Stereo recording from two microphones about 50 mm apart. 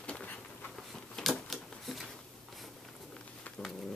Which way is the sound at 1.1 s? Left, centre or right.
Centre.